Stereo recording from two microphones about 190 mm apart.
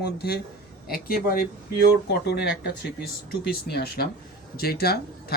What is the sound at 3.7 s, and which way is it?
Speech, 55° left (ahead or behind).